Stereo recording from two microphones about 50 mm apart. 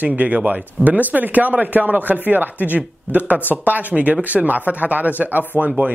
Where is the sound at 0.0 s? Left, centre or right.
Right.